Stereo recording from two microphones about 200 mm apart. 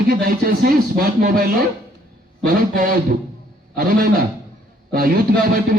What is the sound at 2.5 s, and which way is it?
A man's voice, 45° right (ahead or behind).